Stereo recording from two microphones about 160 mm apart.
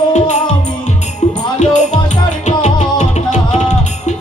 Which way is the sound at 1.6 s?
45° left (ahead or behind).